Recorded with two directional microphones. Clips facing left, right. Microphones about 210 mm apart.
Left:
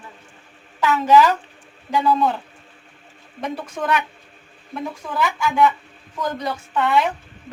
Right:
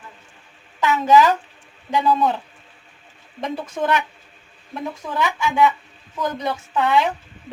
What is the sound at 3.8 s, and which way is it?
A woman's voice, 5° right (ahead or behind).